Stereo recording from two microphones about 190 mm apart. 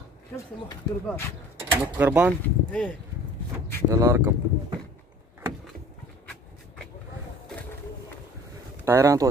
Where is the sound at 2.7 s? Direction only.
5° left (ahead or behind).